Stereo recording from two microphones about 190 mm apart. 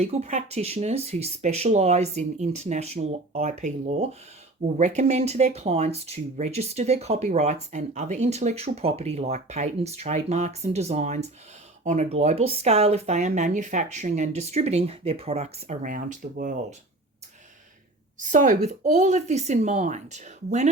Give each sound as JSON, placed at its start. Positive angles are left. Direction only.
{"t": 0.0, "sound": "speech", "side_deg": -35}
{"t": 18.2, "sound": "speech", "side_deg": -45}